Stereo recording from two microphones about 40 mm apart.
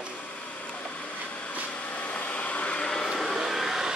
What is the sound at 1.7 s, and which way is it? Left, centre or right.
Vacuum cleaner, left.